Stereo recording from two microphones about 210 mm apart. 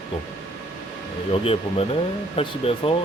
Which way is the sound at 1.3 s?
25° left (ahead or behind).